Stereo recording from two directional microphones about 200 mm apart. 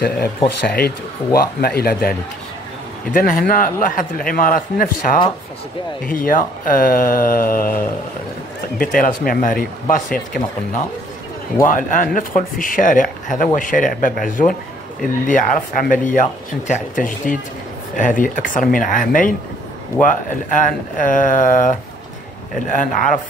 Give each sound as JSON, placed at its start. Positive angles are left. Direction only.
{"t": 0.7, "sound": "a man's voice", "side_deg": 50}
{"t": 11.5, "sound": "a man's voice", "side_deg": 40}